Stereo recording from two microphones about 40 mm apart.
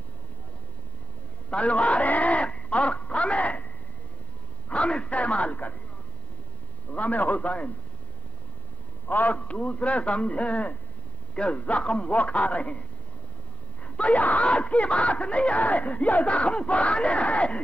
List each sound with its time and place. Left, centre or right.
1.5 s a sound: left
4.6 s a man's voice: left
6.9 s speech: left
9.0 s a man's voice: left
9.4 s speech: left
13.8 s speech: left